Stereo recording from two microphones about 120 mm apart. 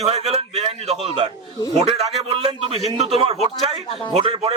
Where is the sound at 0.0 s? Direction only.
60° right (ahead or behind).